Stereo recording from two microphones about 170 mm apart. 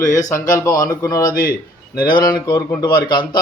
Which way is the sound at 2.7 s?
25° left (ahead or behind).